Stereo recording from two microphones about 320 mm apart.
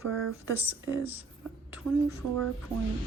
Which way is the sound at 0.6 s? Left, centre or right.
Centre.